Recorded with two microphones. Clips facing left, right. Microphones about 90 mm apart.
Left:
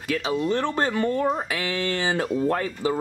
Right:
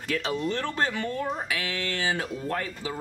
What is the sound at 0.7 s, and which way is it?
Speech, 40° left (ahead or behind).